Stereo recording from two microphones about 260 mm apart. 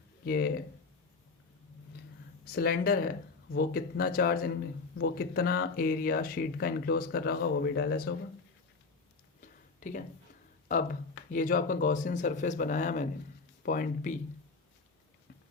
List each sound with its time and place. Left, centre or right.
0.3 s speech: left
2.4 s speech: left
9.4 s a sound: left
10.7 s speech: left